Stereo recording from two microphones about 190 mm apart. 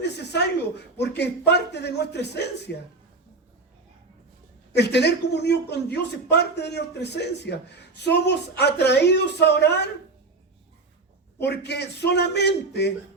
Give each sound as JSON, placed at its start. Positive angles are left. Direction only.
{"t": 0.0, "sound": "a sound", "side_deg": 65}
{"t": 0.9, "sound": "speech", "side_deg": 60}
{"t": 4.7, "sound": "speech", "side_deg": 65}
{"t": 11.4, "sound": "speech", "side_deg": 60}